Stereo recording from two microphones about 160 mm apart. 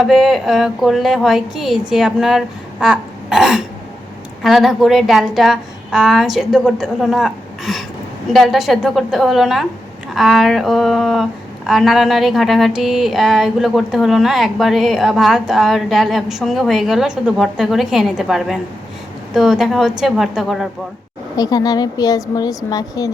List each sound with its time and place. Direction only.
0.0 s speech: centre (ahead or behind)
2.8 s throat clearing: 5° right (ahead or behind)
4.4 s speech: centre (ahead or behind)
21.3 s a woman's voice: 25° left (ahead or behind)